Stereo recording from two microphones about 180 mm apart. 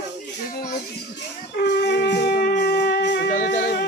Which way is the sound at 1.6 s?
70° left (ahead or behind).